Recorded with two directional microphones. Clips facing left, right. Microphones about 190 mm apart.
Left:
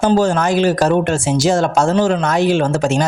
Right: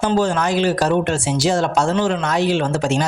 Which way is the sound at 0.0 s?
45° left (ahead or behind).